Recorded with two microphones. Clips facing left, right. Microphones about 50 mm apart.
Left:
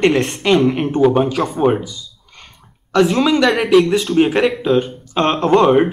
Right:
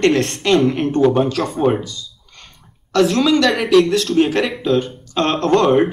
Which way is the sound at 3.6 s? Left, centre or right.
Centre.